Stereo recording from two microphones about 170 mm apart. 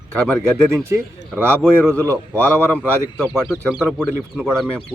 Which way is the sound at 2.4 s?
10° left (ahead or behind).